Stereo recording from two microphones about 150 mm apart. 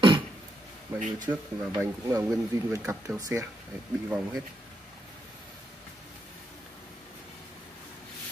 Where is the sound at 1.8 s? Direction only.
20° right (ahead or behind).